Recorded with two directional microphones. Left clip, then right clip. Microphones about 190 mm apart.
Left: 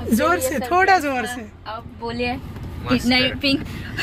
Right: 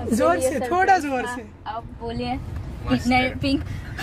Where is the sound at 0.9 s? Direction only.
15° left (ahead or behind).